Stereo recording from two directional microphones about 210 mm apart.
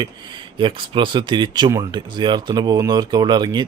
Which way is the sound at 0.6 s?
25° right (ahead or behind).